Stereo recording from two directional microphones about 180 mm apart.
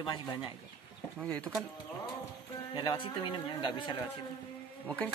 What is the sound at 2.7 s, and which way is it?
A man's voice, 25° left (ahead or behind).